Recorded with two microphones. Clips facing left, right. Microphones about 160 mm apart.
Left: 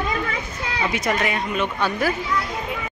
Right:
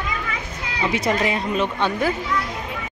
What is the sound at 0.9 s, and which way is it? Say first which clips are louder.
A woman's voice: right 3 dB; 30° right (ahead or behind).